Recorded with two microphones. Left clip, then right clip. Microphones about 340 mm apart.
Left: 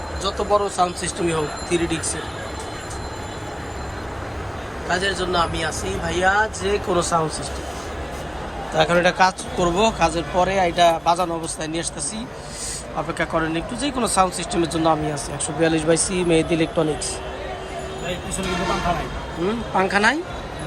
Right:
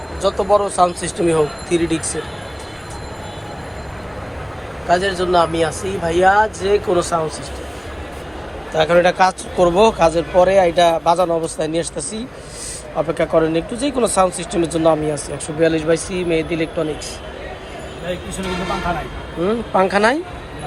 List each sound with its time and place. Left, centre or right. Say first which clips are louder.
0.2 s speech: right 5 dB; centre
4.9 s speech: right 6 dB; centre
8.7 s speech: right 4 dB; centre
13.5 s speech: right 5 dB; left
14.5 s speech: right 4 dB; centre
19.5 s speech: right 5 dB; centre